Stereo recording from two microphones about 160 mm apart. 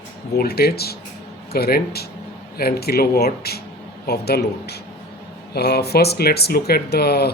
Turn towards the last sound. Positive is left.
turn(degrees=80)